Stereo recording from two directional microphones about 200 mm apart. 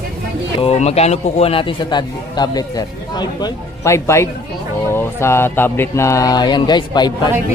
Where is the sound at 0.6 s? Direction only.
30° left (ahead or behind).